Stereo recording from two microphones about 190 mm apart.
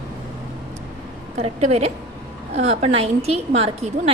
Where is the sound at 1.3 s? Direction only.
35° right (ahead or behind).